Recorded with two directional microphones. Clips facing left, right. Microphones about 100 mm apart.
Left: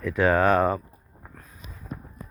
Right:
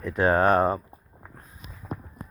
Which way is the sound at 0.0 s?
35° right (ahead or behind).